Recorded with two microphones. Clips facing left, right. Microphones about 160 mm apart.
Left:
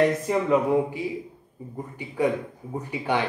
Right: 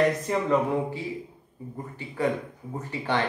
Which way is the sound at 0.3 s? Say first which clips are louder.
Left 3 dB; 10° left (ahead or behind).